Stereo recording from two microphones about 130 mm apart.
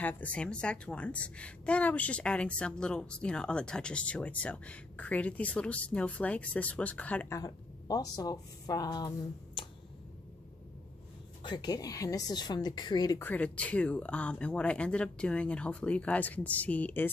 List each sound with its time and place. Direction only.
0.0 s a woman's voice: 10° left (ahead or behind)
7.3 s a woman's voice: 30° left (ahead or behind)
11.4 s speech: 35° left (ahead or behind)
13.2 s a woman's voice: 15° left (ahead or behind)